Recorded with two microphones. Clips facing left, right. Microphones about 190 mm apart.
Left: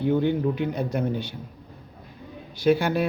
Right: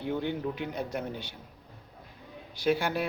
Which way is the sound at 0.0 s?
55° left (ahead or behind).